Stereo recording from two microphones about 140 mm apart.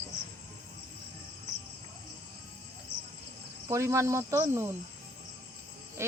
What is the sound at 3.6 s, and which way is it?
Speech, 20° right (ahead or behind).